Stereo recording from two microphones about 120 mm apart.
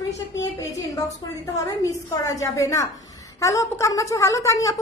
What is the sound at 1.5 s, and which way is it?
A woman's voice, 25° left (ahead or behind).